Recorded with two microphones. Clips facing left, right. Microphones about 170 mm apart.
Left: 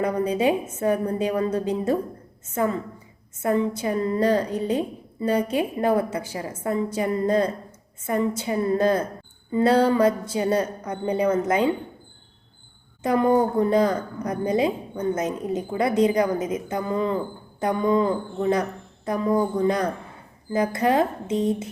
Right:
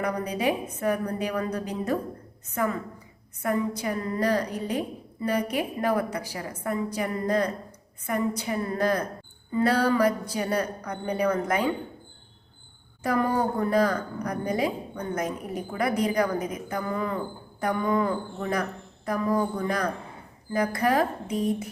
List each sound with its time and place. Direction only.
0.0 s a woman's voice: 25° left (ahead or behind)
13.0 s a woman's voice: 20° left (ahead or behind)